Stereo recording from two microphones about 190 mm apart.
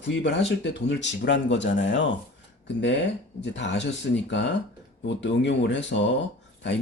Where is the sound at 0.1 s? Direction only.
70° left (ahead or behind).